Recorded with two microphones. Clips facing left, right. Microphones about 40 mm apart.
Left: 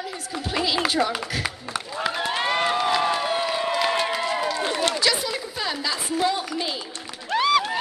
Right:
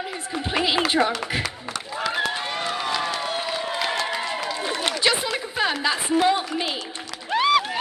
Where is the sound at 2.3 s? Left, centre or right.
Left.